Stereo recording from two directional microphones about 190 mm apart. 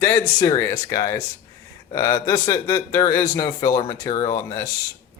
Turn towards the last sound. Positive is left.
turn(degrees=20)  # may be behind; listen again after turning